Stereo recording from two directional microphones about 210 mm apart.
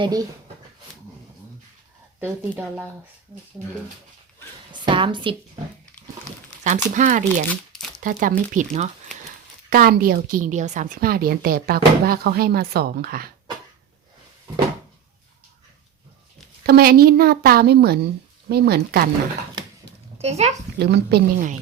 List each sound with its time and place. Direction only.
0.0 s speech: 20° right (ahead or behind)
2.2 s speech: 10° right (ahead or behind)
4.7 s a woman's voice: 25° right (ahead or behind)
6.7 s speech: 35° right (ahead or behind)
7.5 s crumpling: 5° left (ahead or behind)
8.0 s speech: 40° right (ahead or behind)
9.6 s a woman's voice: 45° right (ahead or behind)
16.6 s a woman's voice: 45° right (ahead or behind)
20.2 s speech: 30° right (ahead or behind)
20.7 s a woman's voice: 50° right (ahead or behind)